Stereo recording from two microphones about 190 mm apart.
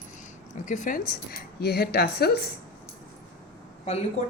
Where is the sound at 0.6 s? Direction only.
40° left (ahead or behind).